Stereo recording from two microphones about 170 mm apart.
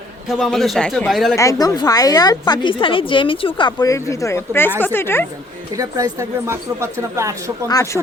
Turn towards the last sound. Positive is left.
turn(degrees=20)  # may be behind; listen again after turning